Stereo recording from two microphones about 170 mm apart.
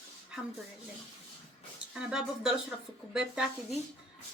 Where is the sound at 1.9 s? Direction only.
5° right (ahead or behind).